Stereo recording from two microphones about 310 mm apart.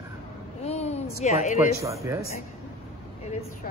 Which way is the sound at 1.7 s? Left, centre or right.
Centre.